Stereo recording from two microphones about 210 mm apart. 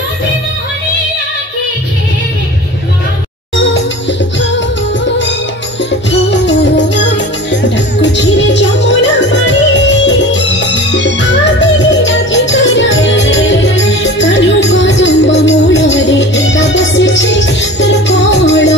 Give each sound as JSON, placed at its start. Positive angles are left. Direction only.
{"t": 5.9, "sound": "music", "side_deg": 60}